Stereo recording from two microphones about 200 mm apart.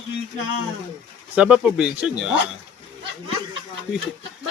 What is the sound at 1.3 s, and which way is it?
Speech, 5° right (ahead or behind).